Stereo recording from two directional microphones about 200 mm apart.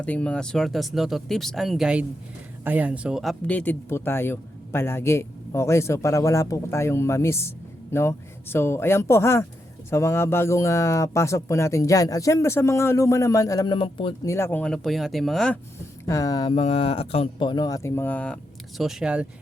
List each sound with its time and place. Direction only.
0.0 s speech: 5° left (ahead or behind); by 14.1 s 25° left (ahead or behind)
14.3 s speech: 15° left (ahead or behind)
16.0 s speech: 15° left (ahead or behind); by 19.3 s 5° right (ahead or behind)